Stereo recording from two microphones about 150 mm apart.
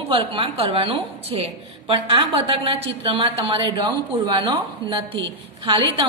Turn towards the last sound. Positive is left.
turn(degrees=-35)  # may be behind; listen again after turning